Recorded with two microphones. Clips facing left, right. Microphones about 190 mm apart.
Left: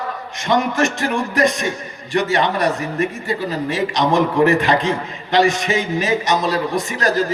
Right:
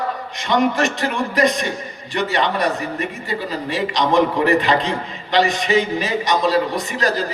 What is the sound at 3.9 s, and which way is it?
A man's voice, 45° left (ahead or behind).